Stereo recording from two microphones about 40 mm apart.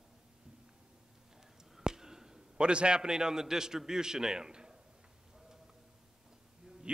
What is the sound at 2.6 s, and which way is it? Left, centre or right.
A man's voice, right.